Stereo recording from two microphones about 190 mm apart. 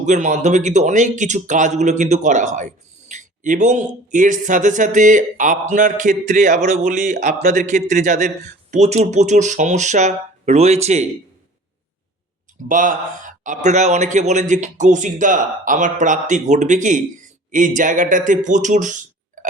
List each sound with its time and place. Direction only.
0.0 s speech: 40° right (ahead or behind)
12.6 s speech: 45° right (ahead or behind)